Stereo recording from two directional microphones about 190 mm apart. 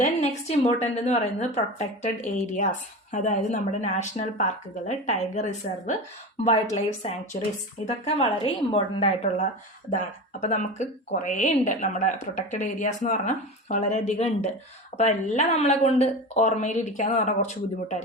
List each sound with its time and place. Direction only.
0.0 s speech: 35° left (ahead or behind)
7.9 s speech: 35° left (ahead or behind)